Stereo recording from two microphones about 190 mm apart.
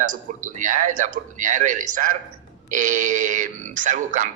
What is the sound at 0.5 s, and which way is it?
A man's voice, 45° right (ahead or behind).